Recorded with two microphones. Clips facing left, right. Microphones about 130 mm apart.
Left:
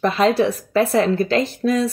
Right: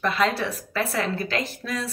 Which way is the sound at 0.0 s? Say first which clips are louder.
Left 7 dB; 25° left (ahead or behind).